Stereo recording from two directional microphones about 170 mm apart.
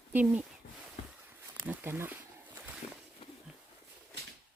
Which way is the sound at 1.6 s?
10° right (ahead or behind).